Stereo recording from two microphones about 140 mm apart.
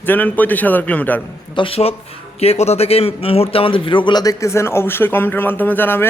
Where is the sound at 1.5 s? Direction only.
40° left (ahead or behind).